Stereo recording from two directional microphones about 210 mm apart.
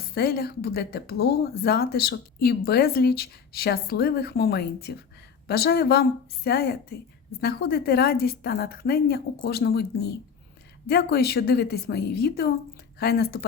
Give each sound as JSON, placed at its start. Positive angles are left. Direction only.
{"t": 0.1, "sound": "speech", "side_deg": 50}